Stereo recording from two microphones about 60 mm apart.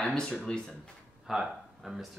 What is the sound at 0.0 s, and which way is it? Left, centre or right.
Speech, centre.